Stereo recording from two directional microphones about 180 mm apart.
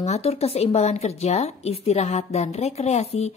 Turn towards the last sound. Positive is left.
turn(degrees=35)  # may be behind; listen again after turning